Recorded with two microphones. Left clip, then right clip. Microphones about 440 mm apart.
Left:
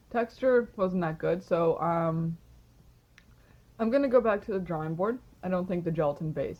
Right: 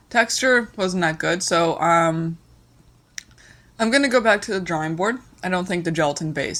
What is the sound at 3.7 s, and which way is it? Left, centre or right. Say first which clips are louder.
Speech: right 6 dB; left.